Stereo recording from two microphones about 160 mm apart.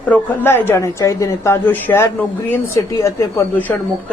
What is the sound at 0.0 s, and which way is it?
Speech, 10° left (ahead or behind).